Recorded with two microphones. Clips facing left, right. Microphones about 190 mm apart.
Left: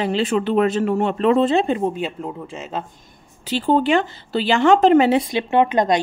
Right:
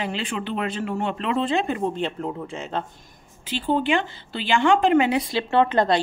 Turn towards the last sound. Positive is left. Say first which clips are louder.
# left 2 dB
turn(degrees=15)  # may be behind; listen again after turning